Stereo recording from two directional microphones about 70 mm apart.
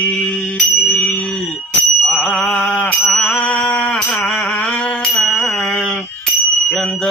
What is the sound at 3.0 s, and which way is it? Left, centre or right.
Music, centre.